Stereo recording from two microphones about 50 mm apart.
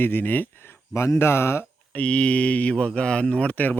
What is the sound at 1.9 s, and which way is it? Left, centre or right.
Speech, left.